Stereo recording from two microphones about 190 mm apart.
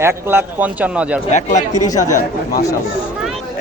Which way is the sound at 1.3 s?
40° left (ahead or behind).